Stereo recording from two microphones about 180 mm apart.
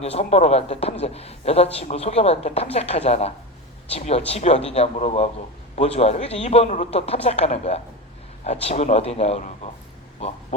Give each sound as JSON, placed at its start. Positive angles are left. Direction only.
{"t": 0.0, "sound": "a man's voice", "side_deg": 35}